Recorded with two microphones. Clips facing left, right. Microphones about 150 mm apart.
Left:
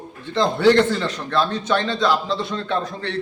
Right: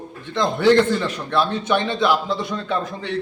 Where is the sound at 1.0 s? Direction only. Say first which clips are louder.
Even; 15° right (ahead or behind).